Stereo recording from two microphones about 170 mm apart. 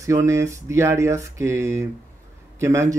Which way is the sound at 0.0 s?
15° right (ahead or behind).